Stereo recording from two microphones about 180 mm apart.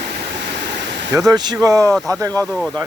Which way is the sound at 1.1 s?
20° right (ahead or behind).